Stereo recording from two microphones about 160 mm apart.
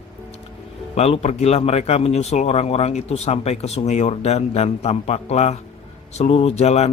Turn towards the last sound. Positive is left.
turn(degrees=45)  # may be behind; listen again after turning